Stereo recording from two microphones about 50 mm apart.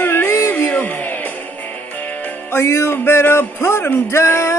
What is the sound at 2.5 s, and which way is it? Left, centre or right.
Music, left.